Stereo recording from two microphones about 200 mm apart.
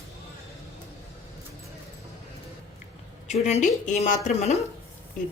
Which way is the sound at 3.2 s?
35° left (ahead or behind).